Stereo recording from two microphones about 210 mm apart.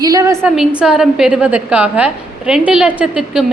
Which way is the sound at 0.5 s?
Centre (ahead or behind).